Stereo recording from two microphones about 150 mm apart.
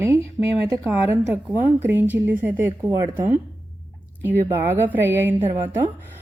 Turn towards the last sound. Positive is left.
turn(degrees=-15)  # may be behind; listen again after turning